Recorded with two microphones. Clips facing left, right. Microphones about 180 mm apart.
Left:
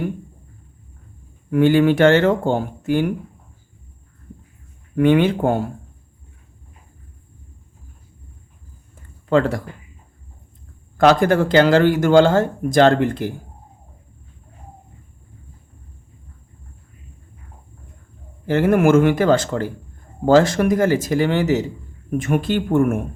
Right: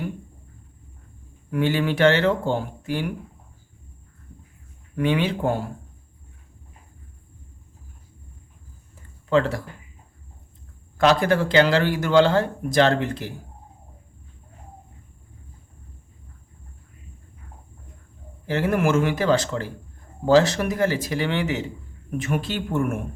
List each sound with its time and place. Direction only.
1.5 s speech: 50° left (ahead or behind)
4.9 s speech: 50° left (ahead or behind)
9.3 s speech: 50° left (ahead or behind)
10.9 s speech: 50° left (ahead or behind)
18.4 s speech: 50° left (ahead or behind)
22.2 s speech: 50° left (ahead or behind)